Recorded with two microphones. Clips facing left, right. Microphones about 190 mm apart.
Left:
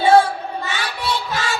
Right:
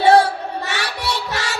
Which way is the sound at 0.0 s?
70° right (ahead or behind).